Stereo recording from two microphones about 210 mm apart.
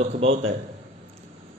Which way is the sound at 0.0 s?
30° right (ahead or behind).